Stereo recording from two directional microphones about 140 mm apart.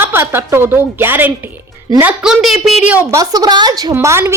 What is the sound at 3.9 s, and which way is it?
Speech, 15° right (ahead or behind).